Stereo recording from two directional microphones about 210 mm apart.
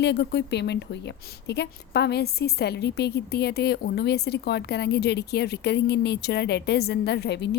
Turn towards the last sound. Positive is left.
turn(degrees=55)  # may be behind; listen again after turning